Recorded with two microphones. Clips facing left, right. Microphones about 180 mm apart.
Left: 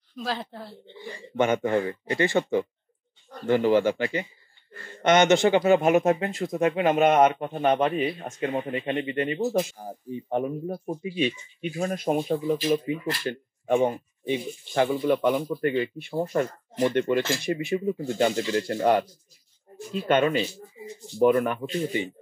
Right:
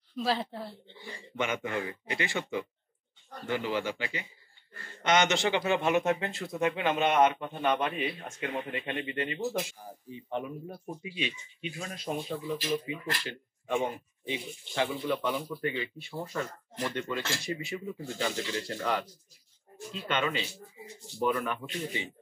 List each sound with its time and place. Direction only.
0.1 s speech: 5° right (ahead or behind)
1.3 s speech: 45° left (ahead or behind)
5.3 s speech: 45° left (ahead or behind); by 9.4 s 30° left (ahead or behind)
9.4 s speech: 45° left (ahead or behind)